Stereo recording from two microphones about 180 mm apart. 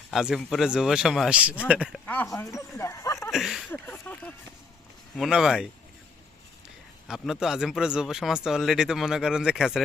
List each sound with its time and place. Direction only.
0.1 s speech: centre (ahead or behind)
2.0 s speech: 15° left (ahead or behind)
3.3 s speech: centre (ahead or behind)
3.7 s speech: 10° left (ahead or behind)
5.1 s speech: centre (ahead or behind)
7.1 s speech: 5° right (ahead or behind)